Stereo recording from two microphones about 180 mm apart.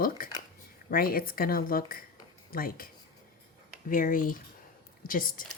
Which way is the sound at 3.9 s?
50° left (ahead or behind).